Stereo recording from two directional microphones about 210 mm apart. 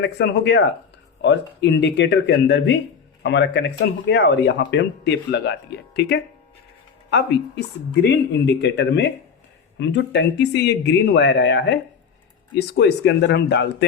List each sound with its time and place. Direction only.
0.0 s speech: 55° left (ahead or behind)